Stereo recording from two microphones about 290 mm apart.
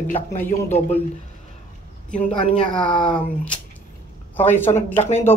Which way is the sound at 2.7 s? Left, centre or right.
Centre.